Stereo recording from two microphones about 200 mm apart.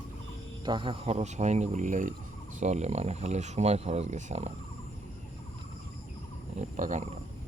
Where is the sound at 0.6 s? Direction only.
25° right (ahead or behind).